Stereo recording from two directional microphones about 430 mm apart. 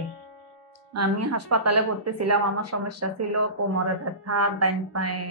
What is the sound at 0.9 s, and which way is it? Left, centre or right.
Speech, right.